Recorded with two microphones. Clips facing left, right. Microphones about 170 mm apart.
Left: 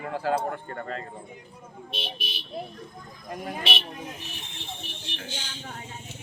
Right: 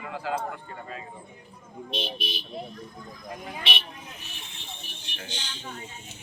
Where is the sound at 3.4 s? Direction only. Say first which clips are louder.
Left 4 dB; 50° left (ahead or behind).